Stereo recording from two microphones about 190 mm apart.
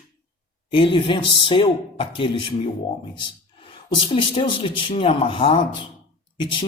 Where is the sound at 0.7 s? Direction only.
25° left (ahead or behind).